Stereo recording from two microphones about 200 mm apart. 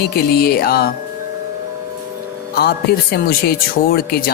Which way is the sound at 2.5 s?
55° left (ahead or behind).